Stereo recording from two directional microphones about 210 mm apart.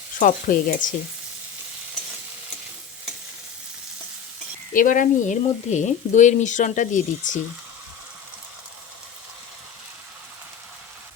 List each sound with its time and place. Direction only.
0.2 s speech: 40° left (ahead or behind)
4.7 s speech: 40° left (ahead or behind)